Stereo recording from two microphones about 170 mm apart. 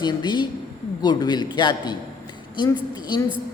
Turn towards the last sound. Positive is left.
turn(degrees=25)  # may be behind; listen again after turning